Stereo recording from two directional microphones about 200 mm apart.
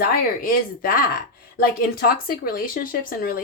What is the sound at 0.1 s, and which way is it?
Speech, 45° left (ahead or behind).